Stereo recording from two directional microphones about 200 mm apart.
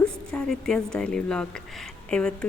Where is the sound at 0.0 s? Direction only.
5° left (ahead or behind).